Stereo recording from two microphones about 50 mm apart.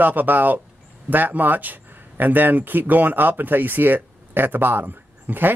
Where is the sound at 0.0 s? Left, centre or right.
Right.